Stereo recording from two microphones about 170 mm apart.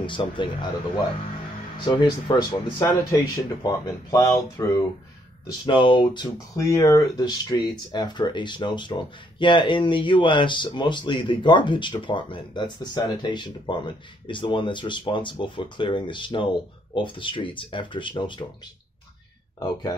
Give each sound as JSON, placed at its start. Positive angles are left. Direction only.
{"t": 0.0, "sound": "speech", "side_deg": 30}
{"t": 1.9, "sound": "speech", "side_deg": 25}
{"t": 5.7, "sound": "speech", "side_deg": 30}
{"t": 6.5, "sound": "speech", "side_deg": 20}
{"t": 19.6, "sound": "speech", "side_deg": 20}